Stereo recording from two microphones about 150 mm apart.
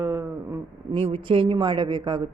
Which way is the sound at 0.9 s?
35° right (ahead or behind).